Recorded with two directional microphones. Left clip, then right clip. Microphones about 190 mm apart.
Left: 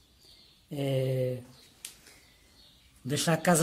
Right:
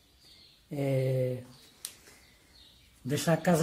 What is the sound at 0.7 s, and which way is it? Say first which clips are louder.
Speech: even; 10° left (ahead or behind).